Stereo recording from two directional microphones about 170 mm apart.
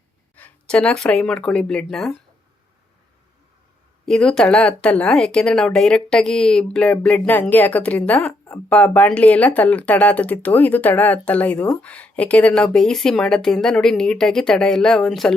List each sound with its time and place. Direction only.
0.3 s speech: 10° left (ahead or behind)
4.0 s speech: 5° left (ahead or behind)